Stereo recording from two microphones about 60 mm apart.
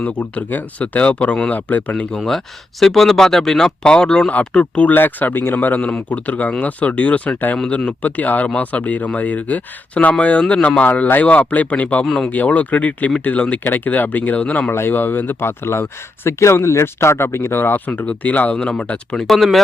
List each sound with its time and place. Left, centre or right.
0.0 s speech: left
2.1 s speech: centre; by 4.9 s left
4.9 s speech: left
12.0 s speech: centre
12.3 s speech: left
14.7 s speech: left
18.5 s speech: centre
19.2 s speech: centre